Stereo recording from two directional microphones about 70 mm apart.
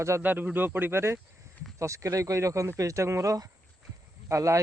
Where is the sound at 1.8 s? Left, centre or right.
Right.